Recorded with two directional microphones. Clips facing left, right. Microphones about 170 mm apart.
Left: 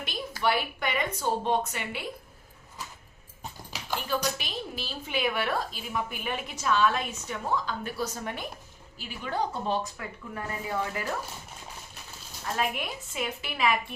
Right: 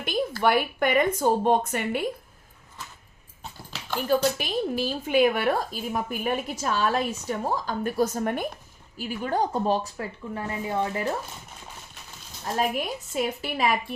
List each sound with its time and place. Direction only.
0.0 s a woman's voice: 50° right (ahead or behind)
4.1 s a woman's voice: 50° right (ahead or behind); by 11.1 s 25° right (ahead or behind)
12.5 s speech: 40° right (ahead or behind)